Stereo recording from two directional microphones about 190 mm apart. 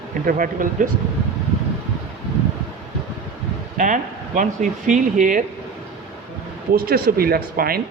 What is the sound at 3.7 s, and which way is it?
Speech, 40° right (ahead or behind).